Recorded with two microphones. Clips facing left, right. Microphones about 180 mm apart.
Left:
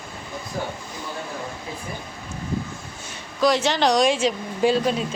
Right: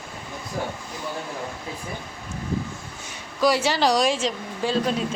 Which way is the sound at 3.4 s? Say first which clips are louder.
Left 1 dB; 10° right (ahead or behind).